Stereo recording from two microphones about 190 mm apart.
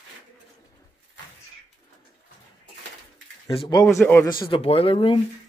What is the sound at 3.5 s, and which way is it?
Speech, 25° left (ahead or behind).